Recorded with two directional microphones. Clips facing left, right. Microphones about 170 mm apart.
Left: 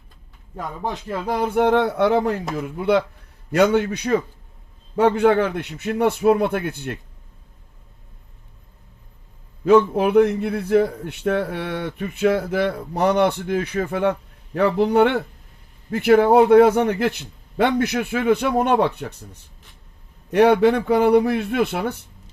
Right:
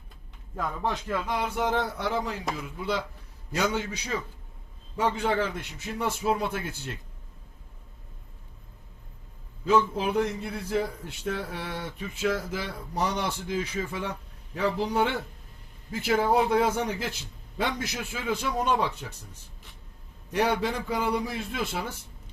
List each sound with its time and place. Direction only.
0.9 s speech: 20° left (ahead or behind)
1.2 s a sound: 35° left (ahead or behind)
1.5 s a man's voice: 60° left (ahead or behind)
9.6 s a man's voice: 60° left (ahead or behind)